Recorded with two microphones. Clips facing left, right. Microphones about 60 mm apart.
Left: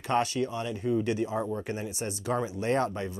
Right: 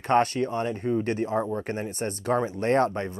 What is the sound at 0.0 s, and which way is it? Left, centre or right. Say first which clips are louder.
Speech: right 5 dB; right.